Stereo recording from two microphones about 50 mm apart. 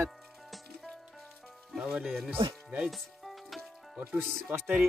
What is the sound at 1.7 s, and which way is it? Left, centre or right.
Speech, centre.